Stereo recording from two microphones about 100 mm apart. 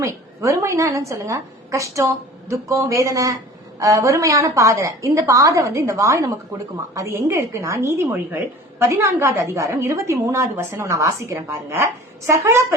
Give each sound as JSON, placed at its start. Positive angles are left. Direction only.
{"t": 0.0, "sound": "a woman's voice", "side_deg": -30}